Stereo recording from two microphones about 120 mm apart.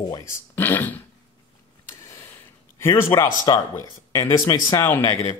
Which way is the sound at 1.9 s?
20° left (ahead or behind).